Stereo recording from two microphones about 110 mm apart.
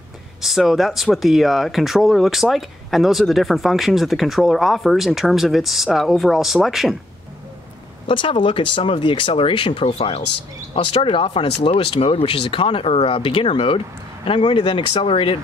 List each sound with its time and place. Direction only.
0.4 s speech: centre (ahead or behind)
8.1 s speech: 50° left (ahead or behind)